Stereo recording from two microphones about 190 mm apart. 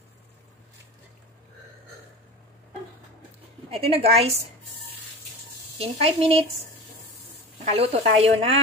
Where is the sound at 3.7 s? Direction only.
30° right (ahead or behind).